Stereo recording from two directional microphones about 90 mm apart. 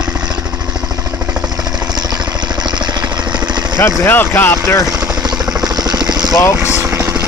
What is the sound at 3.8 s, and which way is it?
Speech, 30° left (ahead or behind).